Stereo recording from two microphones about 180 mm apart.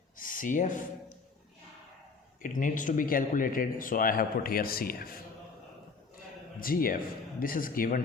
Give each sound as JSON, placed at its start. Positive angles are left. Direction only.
{"t": 0.2, "sound": "speech", "side_deg": 50}
{"t": 2.4, "sound": "speech", "side_deg": 45}
{"t": 6.6, "sound": "speech", "side_deg": 55}